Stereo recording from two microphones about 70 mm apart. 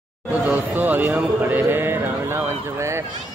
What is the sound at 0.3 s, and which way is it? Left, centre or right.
A man's voice, right.